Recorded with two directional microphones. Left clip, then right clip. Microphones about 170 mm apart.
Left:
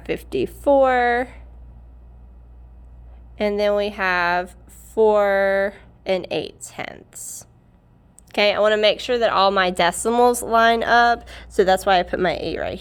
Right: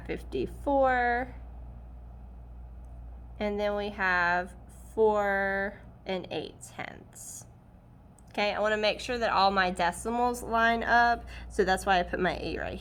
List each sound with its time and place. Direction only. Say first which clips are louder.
0.0 s a woman's voice: left 10 dB; 60° left (ahead or behind)
3.3 s a woman's voice: left 11 dB; 65° left (ahead or behind)
8.3 s speech: left 11 dB; 80° left; by 12.8 s 55° left (ahead or behind)